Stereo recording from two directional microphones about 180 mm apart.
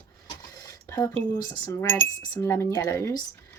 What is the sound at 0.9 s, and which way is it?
Speech, 10° left (ahead or behind).